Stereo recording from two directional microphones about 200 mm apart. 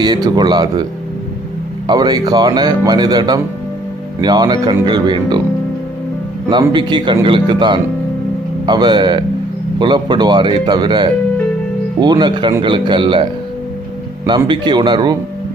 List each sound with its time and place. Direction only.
0.0 s speech: 20° right (ahead or behind)
1.9 s speech: 20° right (ahead or behind)
6.5 s speech: 25° right (ahead or behind)
14.3 s speech: 25° right (ahead or behind)